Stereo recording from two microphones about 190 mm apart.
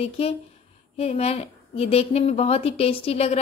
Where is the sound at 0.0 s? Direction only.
30° left (ahead or behind).